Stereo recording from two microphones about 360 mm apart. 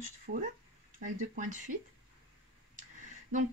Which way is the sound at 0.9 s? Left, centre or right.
Right.